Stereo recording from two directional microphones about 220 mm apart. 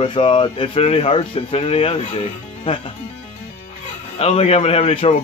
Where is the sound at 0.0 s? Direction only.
20° left (ahead or behind).